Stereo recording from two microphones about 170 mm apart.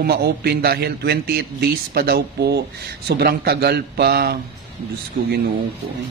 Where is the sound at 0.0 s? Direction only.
70° right (ahead or behind).